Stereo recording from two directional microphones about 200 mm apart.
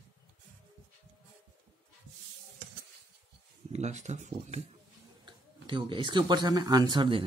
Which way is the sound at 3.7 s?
35° right (ahead or behind).